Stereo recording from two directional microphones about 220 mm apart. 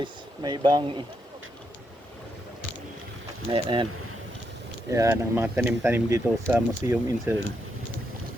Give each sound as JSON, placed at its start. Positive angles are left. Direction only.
{"t": 0.0, "sound": "speech", "side_deg": -20}
{"t": 3.5, "sound": "speech", "side_deg": -25}
{"t": 4.9, "sound": "speech", "side_deg": -10}